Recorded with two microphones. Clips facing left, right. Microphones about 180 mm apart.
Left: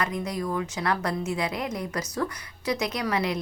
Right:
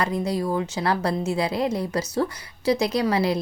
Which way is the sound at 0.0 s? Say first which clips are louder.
Right 5 dB; 30° right (ahead or behind).